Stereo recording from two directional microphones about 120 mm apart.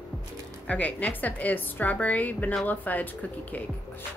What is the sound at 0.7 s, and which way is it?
A woman's voice, 10° left (ahead or behind).